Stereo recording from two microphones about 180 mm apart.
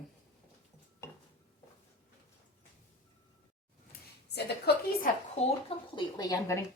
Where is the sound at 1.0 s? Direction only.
15° left (ahead or behind).